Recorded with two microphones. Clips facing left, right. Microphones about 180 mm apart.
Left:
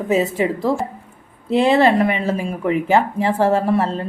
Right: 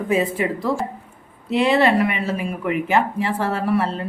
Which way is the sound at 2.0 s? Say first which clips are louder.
Left 3 dB; 30° left (ahead or behind).